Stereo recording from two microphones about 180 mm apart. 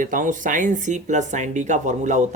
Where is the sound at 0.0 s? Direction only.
45° right (ahead or behind).